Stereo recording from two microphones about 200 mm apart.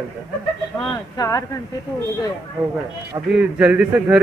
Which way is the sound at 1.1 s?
15° left (ahead or behind).